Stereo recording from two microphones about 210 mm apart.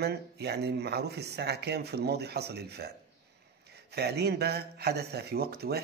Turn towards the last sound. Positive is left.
turn(degrees=-50)  # may be behind; listen again after turning